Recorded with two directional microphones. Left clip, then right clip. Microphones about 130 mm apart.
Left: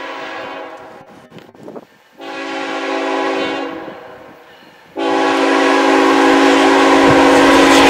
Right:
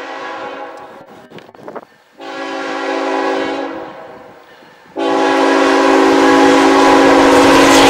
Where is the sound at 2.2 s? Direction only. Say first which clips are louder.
Right 1 dB; 5° left (ahead or behind).